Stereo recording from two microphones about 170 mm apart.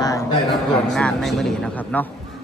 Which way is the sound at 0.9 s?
Centre (ahead or behind).